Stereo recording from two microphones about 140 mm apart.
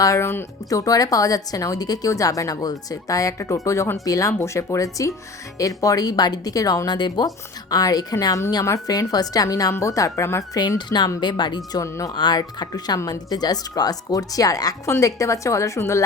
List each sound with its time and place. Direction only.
0.0 s a woman's voice: 20° left (ahead or behind)